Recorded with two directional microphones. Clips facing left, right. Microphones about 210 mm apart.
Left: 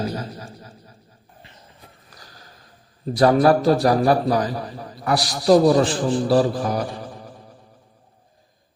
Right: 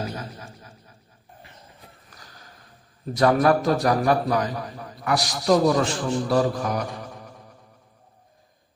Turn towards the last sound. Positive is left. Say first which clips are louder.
# left 3 dB
turn(degrees=30)  # may be behind; listen again after turning